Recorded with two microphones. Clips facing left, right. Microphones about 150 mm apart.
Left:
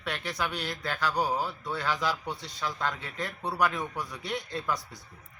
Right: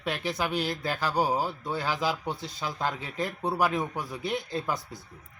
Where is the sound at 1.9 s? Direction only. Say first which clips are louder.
Right 1 dB; 5° right (ahead or behind).